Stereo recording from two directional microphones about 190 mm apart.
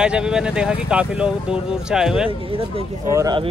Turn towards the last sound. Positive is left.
turn(degrees=-20)  # may be behind; listen again after turning